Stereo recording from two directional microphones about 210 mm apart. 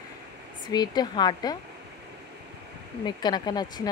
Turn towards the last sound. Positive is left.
turn(degrees=20)  # may be behind; listen again after turning